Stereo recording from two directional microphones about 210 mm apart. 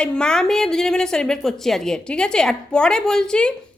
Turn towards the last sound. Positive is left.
turn(degrees=5)  # may be behind; listen again after turning